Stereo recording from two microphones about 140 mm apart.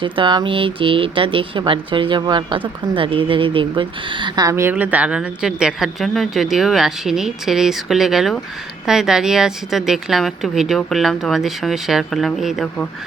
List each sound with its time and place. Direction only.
0.0 s a woman's voice: 35° right (ahead or behind); by 12.9 s 5° left (ahead or behind)